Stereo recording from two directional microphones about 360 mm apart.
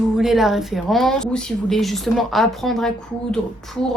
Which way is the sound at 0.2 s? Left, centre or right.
Centre.